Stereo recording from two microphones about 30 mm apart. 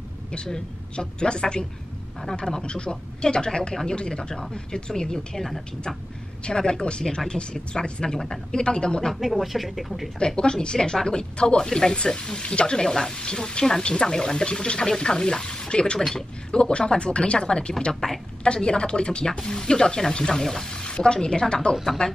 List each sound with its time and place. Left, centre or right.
0.9 s speech: left
5.4 s speech: centre
6.4 s speech: left
9.1 s speech: centre
10.1 s speech: left
12.8 s speech: centre
19.3 s speech: left
20.7 s a woman's voice: left